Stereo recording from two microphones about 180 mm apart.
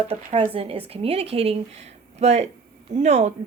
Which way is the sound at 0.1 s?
30° right (ahead or behind).